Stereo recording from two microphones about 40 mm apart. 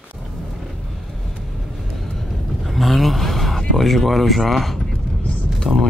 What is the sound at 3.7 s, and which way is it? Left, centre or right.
Speech, centre.